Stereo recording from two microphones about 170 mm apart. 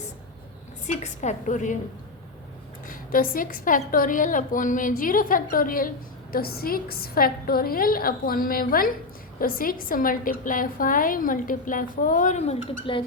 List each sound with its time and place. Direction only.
0.9 s a woman's voice: 45° left (ahead or behind)
2.8 s a woman's voice: 55° left (ahead or behind); by 13.0 s 35° left (ahead or behind)